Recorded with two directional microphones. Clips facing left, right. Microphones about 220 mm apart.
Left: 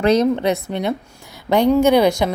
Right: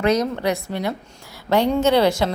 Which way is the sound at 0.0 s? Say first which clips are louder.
Left 4 dB; 30° left (ahead or behind).